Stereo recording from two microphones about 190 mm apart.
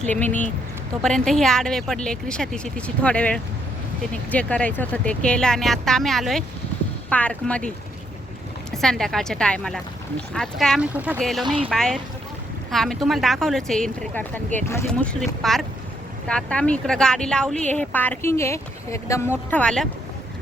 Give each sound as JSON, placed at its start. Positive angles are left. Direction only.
{"t": 0.0, "sound": "speech", "side_deg": 10}
{"t": 8.7, "sound": "speech", "side_deg": 0}
{"t": 10.9, "sound": "speech", "side_deg": -10}
{"t": 11.2, "sound": "speech", "side_deg": 0}
{"t": 11.4, "sound": "speech", "side_deg": -30}
{"t": 11.7, "sound": "speech", "side_deg": 5}